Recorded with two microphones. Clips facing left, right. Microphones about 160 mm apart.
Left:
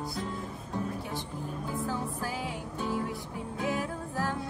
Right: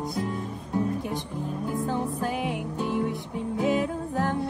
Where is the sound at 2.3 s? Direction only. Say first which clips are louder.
Right 7 dB; 65° right (ahead or behind).